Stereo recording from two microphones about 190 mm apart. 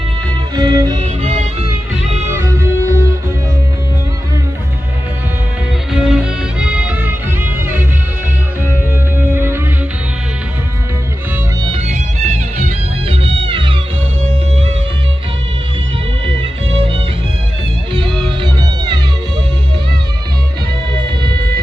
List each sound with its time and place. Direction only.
0.5 s music: 20° right (ahead or behind)
1.0 s music: 35° right (ahead or behind)
2.3 s music: 15° right (ahead or behind)
5.9 s music: centre (ahead or behind)
9.1 s music: 10° right (ahead or behind)
11.6 s music: 35° right (ahead or behind)
16.4 s music: 30° right (ahead or behind)
18.0 s music: centre (ahead or behind)
18.6 s music: 20° right (ahead or behind)